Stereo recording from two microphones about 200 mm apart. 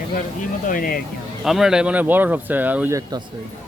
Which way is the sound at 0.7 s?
45° left (ahead or behind).